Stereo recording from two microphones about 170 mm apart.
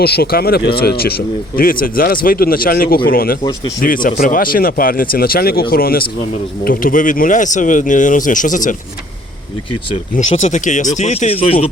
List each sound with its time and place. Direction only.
0.0 s speech: 65° left (ahead or behind); by 8.7 s 50° left (ahead or behind)
10.2 s speech: 45° left (ahead or behind)